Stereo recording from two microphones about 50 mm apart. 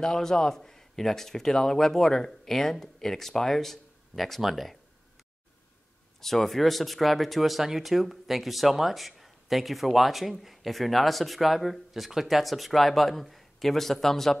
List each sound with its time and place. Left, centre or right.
0.0 s a man's voice: centre
6.2 s speech: centre